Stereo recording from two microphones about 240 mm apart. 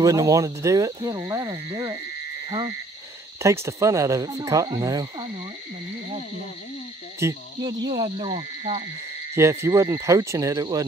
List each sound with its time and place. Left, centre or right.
0.0 s speech: centre
3.3 s speech: centre
7.2 s speech: centre
9.3 s speech: centre